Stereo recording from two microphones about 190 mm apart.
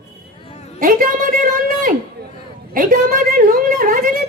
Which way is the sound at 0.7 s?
50° right (ahead or behind).